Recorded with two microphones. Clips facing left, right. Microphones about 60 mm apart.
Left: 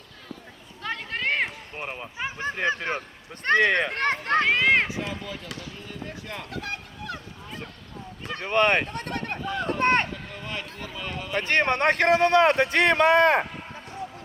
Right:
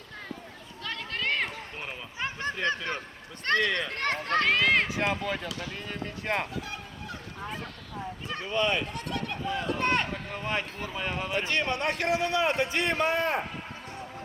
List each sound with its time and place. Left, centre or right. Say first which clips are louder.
0.8 s a sound: left 4 dB; left
1.8 s run: left 7 dB; left
2.1 s a sound: left 1 dB; centre
2.6 s a child's voice: left 4 dB; left
3.6 s speech: left 6 dB; left
4.0 s a child's voice: left 1 dB; centre
4.9 s speech: right 4 dB; right
6.5 s speech: left 3 dB; left
8.4 s speech: left 6 dB; left
10.1 s speech: right 3 dB; right
11.3 s speech: left 8 dB; left